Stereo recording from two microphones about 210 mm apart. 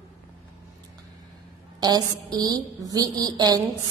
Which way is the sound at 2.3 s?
15° right (ahead or behind).